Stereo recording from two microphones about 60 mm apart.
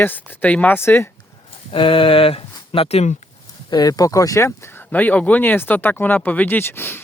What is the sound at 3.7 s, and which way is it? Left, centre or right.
Speech, left.